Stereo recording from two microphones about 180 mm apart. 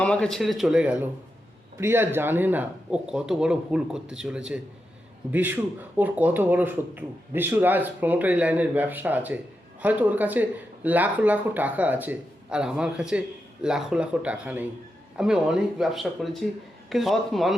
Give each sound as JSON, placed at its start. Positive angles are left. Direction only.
{"t": 0.0, "sound": "speech", "side_deg": 5}